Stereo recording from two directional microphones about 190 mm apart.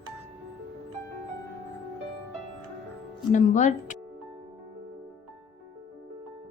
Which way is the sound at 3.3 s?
40° left (ahead or behind).